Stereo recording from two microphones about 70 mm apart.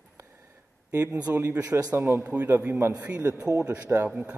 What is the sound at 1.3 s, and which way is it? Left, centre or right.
A man's voice, right.